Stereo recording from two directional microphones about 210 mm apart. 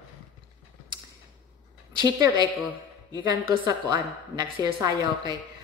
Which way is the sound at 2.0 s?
20° right (ahead or behind).